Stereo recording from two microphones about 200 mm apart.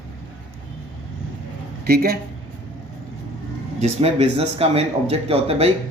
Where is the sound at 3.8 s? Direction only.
30° right (ahead or behind).